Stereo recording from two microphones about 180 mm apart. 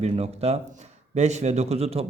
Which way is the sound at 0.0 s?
35° right (ahead or behind).